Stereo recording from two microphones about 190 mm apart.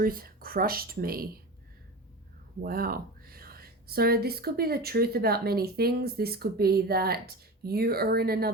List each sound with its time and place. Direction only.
0.0 s speech: 50° right (ahead or behind)
2.6 s speech: 50° right (ahead or behind)